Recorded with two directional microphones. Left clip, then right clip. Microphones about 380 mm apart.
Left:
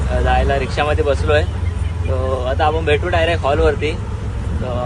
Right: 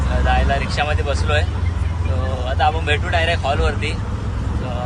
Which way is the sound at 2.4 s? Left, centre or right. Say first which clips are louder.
Left 1 dB; centre.